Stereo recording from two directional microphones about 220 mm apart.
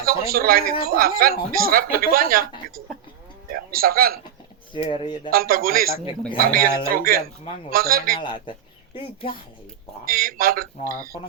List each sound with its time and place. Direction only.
0.0 s a man's voice: 40° right (ahead or behind)
4.7 s speech: 20° left (ahead or behind)
5.3 s a man's voice: 40° right (ahead or behind)
10.1 s a man's voice: 40° right (ahead or behind)
10.9 s speech: 15° right (ahead or behind)